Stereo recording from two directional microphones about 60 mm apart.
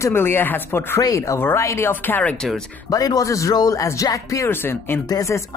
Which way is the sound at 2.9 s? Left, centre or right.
Left.